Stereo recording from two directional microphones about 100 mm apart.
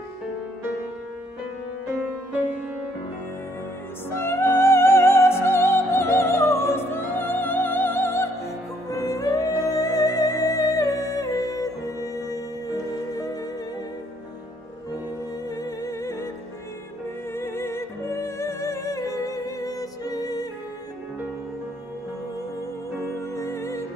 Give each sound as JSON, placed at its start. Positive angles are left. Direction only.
{"t": 4.1, "sound": "music", "side_deg": 25}
{"t": 8.9, "sound": "music", "side_deg": 35}
{"t": 15.5, "sound": "music", "side_deg": 35}
{"t": 17.3, "sound": "music", "side_deg": 25}
{"t": 23.3, "sound": "music", "side_deg": 30}